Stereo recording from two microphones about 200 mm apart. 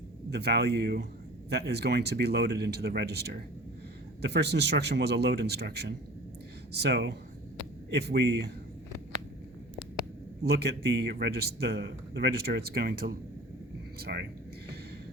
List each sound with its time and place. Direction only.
0.3 s speech: 55° right (ahead or behind)
10.4 s a man's voice: 55° right (ahead or behind)